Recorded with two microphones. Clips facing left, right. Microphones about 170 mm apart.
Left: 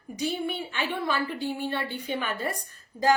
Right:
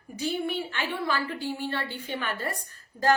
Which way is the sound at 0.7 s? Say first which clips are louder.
Left 1 dB; 15° left (ahead or behind).